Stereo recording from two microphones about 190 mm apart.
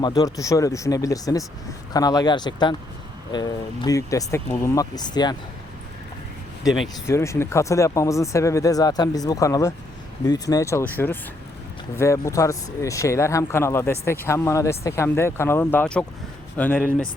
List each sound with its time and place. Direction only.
0.0 s speech: 20° left (ahead or behind)
6.7 s speech: centre (ahead or behind)
7.1 s speech: 15° left (ahead or behind)